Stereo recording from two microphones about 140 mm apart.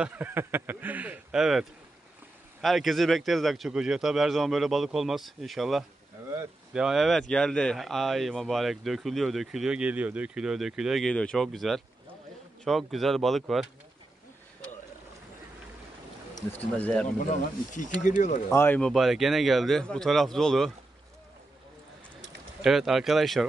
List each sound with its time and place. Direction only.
0.0 s speech: 10° right (ahead or behind)
16.7 s speech: 10° left (ahead or behind)
17.3 s speech: 65° left (ahead or behind)
18.5 s speech: 15° left (ahead or behind)
18.8 s speech: centre (ahead or behind)
22.6 s speech: centre (ahead or behind)